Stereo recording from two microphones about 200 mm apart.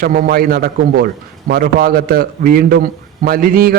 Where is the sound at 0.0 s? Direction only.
45° right (ahead or behind).